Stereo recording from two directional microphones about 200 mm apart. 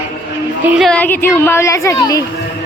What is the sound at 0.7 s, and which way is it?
A woman's voice, centre (ahead or behind).